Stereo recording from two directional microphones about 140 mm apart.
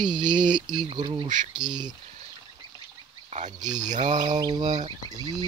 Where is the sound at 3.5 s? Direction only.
30° right (ahead or behind).